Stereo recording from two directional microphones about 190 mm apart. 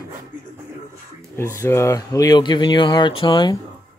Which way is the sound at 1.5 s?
15° left (ahead or behind).